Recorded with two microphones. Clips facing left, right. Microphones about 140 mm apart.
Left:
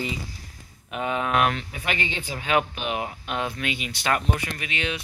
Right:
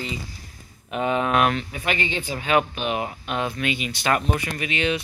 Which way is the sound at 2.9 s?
45° right (ahead or behind).